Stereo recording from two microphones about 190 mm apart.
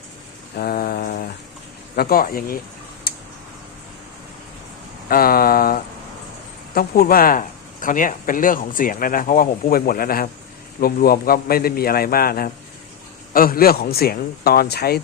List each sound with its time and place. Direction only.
0.5 s mantra: 55° left (ahead or behind)
2.0 s speech: 50° left (ahead or behind)
3.1 s tick-tock: 50° left (ahead or behind)
5.0 s speech: 50° left (ahead or behind)